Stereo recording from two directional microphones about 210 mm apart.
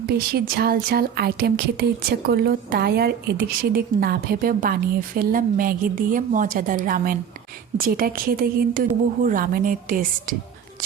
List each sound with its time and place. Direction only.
0.1 s a woman's voice: 45° right (ahead or behind)